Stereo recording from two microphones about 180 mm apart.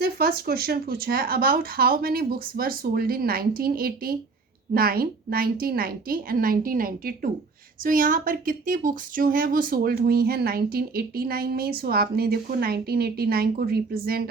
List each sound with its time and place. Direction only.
0.0 s a woman's voice: 60° right (ahead or behind)